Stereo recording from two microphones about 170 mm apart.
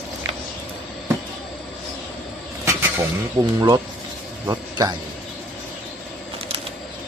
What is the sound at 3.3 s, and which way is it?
A man's voice, 20° right (ahead or behind).